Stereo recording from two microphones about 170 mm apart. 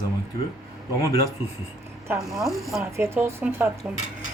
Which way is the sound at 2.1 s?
10° right (ahead or behind).